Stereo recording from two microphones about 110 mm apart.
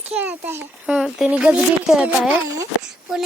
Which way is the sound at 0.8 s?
10° right (ahead or behind).